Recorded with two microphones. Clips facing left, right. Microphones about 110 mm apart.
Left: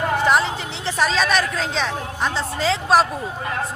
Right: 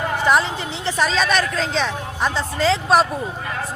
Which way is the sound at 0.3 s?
Centre (ahead or behind).